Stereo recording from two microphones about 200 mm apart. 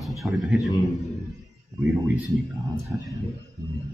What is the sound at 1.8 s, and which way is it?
A man's voice, 15° right (ahead or behind).